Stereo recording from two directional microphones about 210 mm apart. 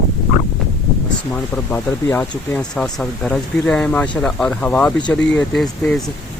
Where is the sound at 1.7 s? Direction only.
5° left (ahead or behind).